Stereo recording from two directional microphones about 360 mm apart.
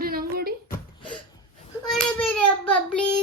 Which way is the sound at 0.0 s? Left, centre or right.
Right.